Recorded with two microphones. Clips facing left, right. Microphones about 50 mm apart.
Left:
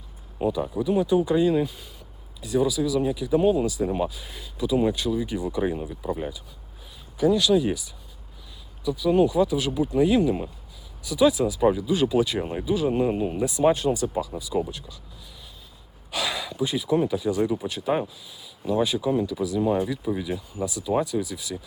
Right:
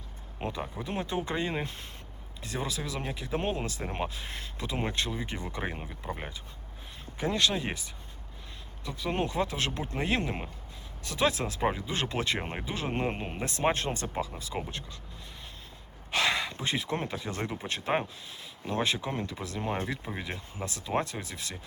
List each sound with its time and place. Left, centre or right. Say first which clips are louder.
0.4 s speech: left 11 dB; right
5.6 s speech: left 9 dB; right
7.2 s speech: left 9 dB; right
8.8 s speech: left 11 dB; right
11.6 s speech: left 9 dB; right
16.1 s speech: even; right